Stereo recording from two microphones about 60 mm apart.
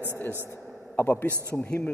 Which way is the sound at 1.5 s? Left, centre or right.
Centre.